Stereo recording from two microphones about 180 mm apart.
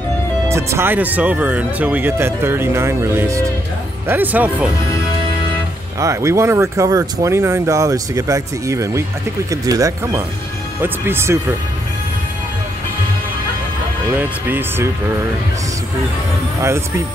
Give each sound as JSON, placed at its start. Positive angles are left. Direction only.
{"t": 0.5, "sound": "speech", "side_deg": -15}
{"t": 5.9, "sound": "speech", "side_deg": -15}
{"t": 14.1, "sound": "speech", "side_deg": -10}
{"t": 16.6, "sound": "speech", "side_deg": -15}